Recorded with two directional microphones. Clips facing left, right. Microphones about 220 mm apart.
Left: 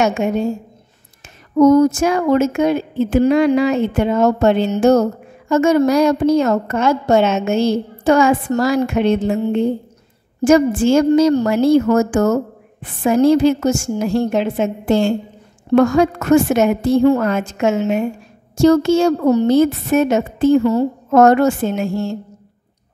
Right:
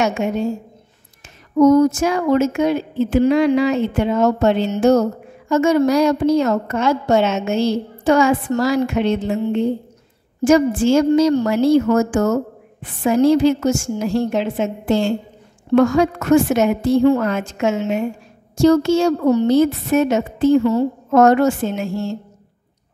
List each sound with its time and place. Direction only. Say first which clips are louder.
1.6 s a woman's voice: left 1 dB; 50° left (ahead or behind)
10.4 s a woman's voice: left 2 dB; 50° left (ahead or behind)